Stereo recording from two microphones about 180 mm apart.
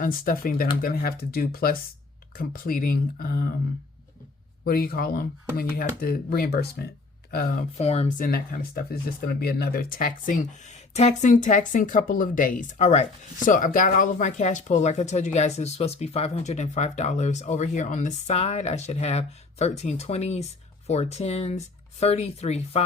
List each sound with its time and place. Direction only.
0.0 s speech: 50° left (ahead or behind)
4.6 s speech: 55° left (ahead or behind)
7.8 s speech: 35° left (ahead or behind)
8.2 s speech: 50° left (ahead or behind); by 22.8 s 35° left (ahead or behind)